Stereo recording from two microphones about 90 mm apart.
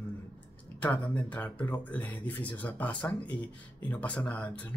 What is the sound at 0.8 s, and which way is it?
Speech, 15° left (ahead or behind).